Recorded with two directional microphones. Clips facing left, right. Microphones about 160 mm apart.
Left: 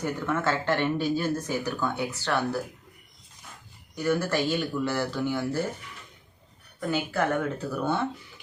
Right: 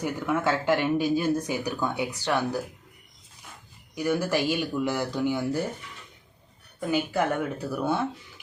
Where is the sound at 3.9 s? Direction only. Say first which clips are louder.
Even; 10° right (ahead or behind).